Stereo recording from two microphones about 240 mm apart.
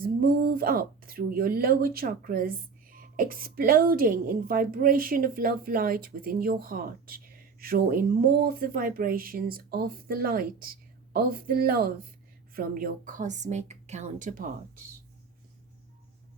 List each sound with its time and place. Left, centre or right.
0.0 s a woman's voice: right